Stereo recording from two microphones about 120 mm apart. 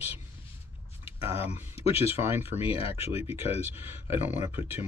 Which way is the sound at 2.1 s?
20° right (ahead or behind).